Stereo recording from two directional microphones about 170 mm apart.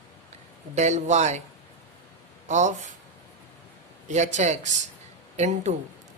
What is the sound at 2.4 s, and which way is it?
Speech, 45° right (ahead or behind).